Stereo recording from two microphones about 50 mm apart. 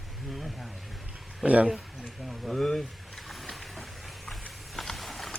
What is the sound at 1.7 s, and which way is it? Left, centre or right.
Vehicle, centre.